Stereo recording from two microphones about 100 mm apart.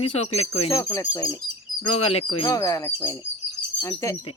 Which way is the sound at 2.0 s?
90° left.